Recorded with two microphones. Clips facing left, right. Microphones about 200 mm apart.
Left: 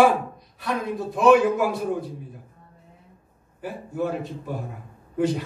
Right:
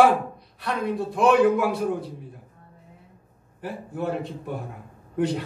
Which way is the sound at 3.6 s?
60° right (ahead or behind).